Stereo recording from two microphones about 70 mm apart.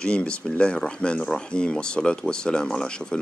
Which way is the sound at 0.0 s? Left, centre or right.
Centre.